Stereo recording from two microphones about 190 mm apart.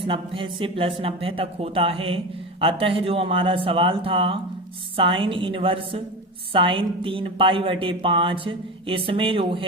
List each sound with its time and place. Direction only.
0.0 s speech: 25° right (ahead or behind)